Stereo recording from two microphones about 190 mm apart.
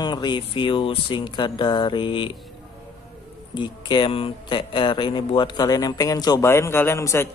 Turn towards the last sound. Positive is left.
turn(degrees=15)  # may be behind; listen again after turning